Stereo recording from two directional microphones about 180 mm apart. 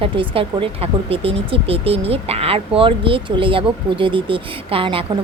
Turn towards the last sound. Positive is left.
turn(degrees=-30)  # may be behind; listen again after turning